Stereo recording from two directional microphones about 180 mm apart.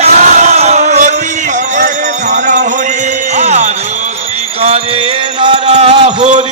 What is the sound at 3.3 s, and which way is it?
Music, 40° right (ahead or behind).